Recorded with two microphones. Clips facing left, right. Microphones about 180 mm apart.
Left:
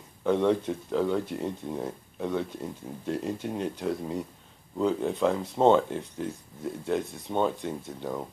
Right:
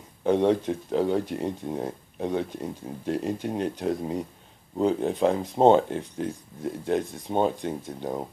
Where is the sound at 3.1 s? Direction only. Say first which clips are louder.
Right 3 dB; 15° right (ahead or behind).